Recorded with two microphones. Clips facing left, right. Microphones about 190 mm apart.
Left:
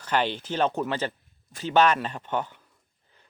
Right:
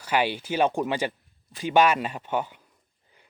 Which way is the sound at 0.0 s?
10° right (ahead or behind).